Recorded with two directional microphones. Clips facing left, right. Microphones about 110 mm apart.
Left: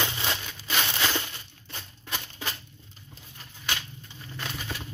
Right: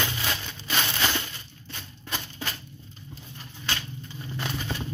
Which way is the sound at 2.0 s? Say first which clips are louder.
Right 1 dB; 10° left (ahead or behind).